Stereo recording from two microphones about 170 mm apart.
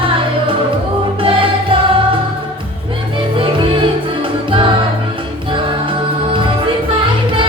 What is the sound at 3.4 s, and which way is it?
Music, 30° right (ahead or behind).